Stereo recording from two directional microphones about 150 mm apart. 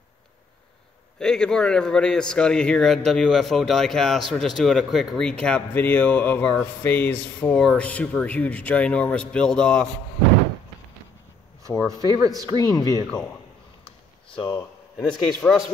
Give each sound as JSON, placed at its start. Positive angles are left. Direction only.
{"t": 1.2, "sound": "a man's voice", "side_deg": 5}
{"t": 11.8, "sound": "speech", "side_deg": -20}
{"t": 12.5, "sound": "speech", "side_deg": 25}
{"t": 14.4, "sound": "speech", "side_deg": 30}
{"t": 15.0, "sound": "a man's voice", "side_deg": 5}